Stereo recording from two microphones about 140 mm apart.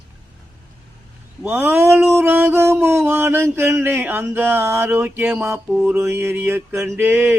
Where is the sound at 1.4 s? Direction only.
15° right (ahead or behind).